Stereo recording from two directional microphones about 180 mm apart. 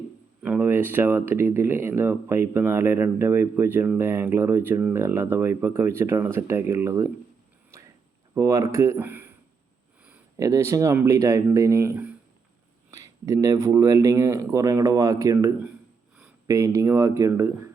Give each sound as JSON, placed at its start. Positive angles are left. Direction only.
{"t": 0.4, "sound": "speech", "side_deg": -10}
{"t": 7.7, "sound": "a sound", "side_deg": -15}
{"t": 8.4, "sound": "speech", "side_deg": -15}
{"t": 10.3, "sound": "speech", "side_deg": -15}
{"t": 13.2, "sound": "speech", "side_deg": -20}